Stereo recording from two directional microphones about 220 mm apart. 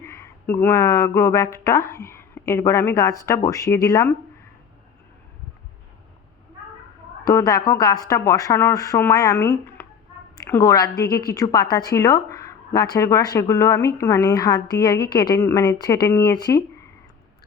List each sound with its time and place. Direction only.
0.0 s speech: 10° left (ahead or behind)
7.3 s a woman's voice: 15° left (ahead or behind)